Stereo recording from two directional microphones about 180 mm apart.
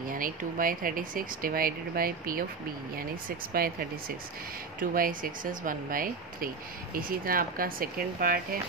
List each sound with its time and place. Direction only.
0.1 s speech: 50° right (ahead or behind)
4.7 s speech: 50° right (ahead or behind)